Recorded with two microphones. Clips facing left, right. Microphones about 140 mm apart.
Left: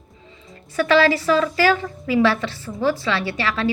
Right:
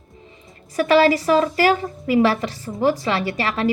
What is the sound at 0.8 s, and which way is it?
Speech, 40° right (ahead or behind).